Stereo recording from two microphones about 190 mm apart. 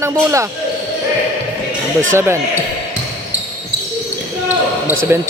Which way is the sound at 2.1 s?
10° right (ahead or behind).